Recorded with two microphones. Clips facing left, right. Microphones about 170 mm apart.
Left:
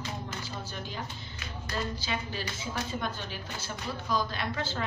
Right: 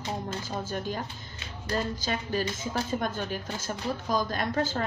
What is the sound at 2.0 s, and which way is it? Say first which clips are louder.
A woman's voice: right 5 dB; 45° right (ahead or behind).